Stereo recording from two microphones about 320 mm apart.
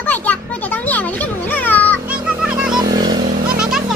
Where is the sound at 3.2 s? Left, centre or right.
Right.